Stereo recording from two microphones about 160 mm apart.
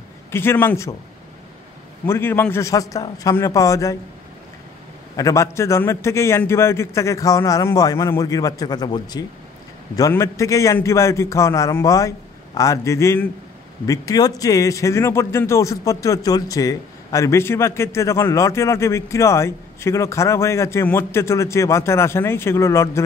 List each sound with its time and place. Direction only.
0.3 s a man's voice: 15° left (ahead or behind)
2.0 s a man's voice: 15° left (ahead or behind)
5.1 s a man's voice: 20° left (ahead or behind)